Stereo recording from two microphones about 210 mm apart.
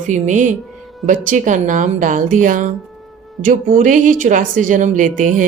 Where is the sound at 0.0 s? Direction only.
35° right (ahead or behind).